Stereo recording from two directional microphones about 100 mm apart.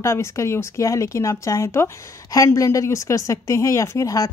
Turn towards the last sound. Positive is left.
turn(degrees=35)  # may be behind; listen again after turning